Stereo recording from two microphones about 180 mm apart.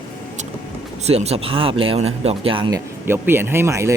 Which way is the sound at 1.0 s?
35° right (ahead or behind).